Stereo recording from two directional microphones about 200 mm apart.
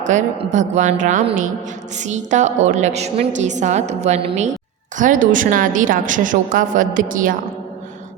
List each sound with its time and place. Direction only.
0.0 s a woman's voice: 35° right (ahead or behind)